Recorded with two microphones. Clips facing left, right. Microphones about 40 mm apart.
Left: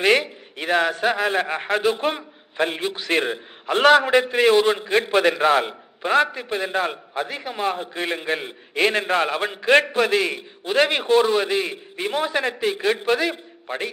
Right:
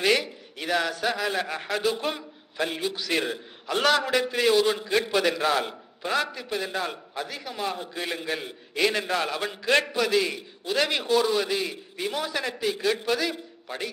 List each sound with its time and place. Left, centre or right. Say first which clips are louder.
0.0 s a man's voice: left 5 dB; left